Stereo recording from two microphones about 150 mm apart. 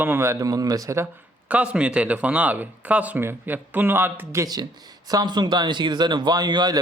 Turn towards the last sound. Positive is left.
turn(degrees=-30)  # may be behind; listen again after turning